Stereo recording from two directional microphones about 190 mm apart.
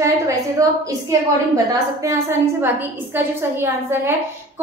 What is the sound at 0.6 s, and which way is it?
A woman's voice, 20° right (ahead or behind).